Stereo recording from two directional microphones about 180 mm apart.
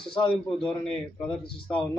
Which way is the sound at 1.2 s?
5° left (ahead or behind).